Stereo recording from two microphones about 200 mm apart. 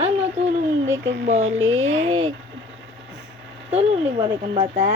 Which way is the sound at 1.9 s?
25° right (ahead or behind).